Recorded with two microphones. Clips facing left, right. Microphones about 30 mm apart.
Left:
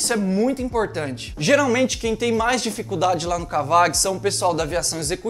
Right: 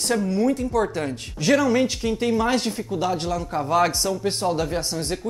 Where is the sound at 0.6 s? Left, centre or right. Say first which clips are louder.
Even; left.